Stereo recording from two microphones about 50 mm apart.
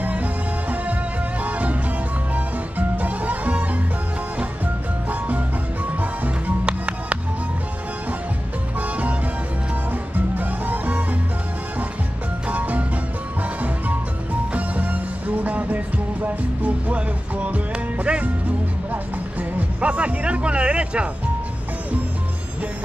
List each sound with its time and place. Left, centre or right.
0.0 s music: right
3.0 s music: right
5.9 s music: right
6.6 s music: right
10.1 s music: right
12.4 s music: right
14.5 s music: right
19.8 s music: right